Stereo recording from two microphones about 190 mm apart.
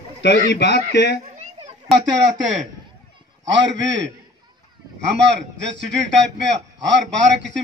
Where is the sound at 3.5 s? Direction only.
70° right (ahead or behind).